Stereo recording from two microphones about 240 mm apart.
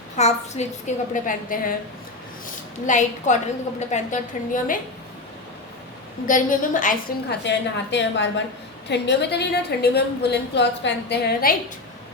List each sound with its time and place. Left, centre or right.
0.2 s a woman's voice: left
2.8 s a woman's voice: left
6.2 s a woman's voice: left
7.4 s a woman's voice: left